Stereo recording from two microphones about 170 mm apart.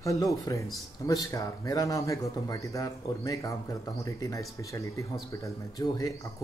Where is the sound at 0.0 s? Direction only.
20° left (ahead or behind).